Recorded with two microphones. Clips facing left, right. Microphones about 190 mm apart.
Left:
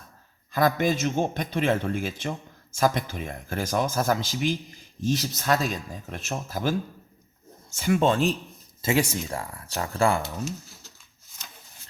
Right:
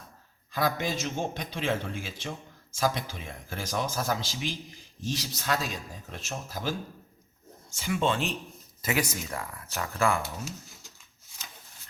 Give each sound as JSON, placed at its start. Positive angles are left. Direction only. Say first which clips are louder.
{"t": 0.5, "sound": "speech", "louder": "left 6 dB", "side_deg": 50}
{"t": 7.8, "sound": "speech", "louder": "left 6 dB", "side_deg": 50}
{"t": 8.8, "sound": "speech", "louder": "left 5 dB", "side_deg": 30}